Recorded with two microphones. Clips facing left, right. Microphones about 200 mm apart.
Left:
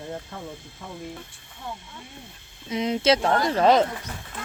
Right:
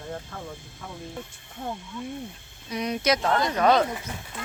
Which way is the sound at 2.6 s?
25° left (ahead or behind).